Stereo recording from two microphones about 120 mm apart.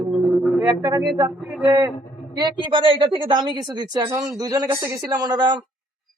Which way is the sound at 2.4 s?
45° right (ahead or behind).